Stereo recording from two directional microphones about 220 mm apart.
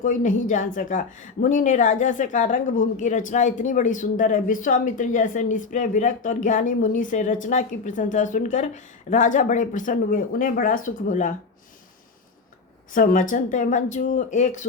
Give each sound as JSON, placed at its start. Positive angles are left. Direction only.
{"t": 0.0, "sound": "a woman's voice", "side_deg": 35}
{"t": 12.9, "sound": "a woman's voice", "side_deg": 35}